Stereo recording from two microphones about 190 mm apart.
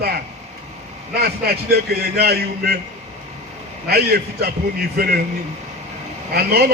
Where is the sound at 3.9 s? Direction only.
55° right (ahead or behind).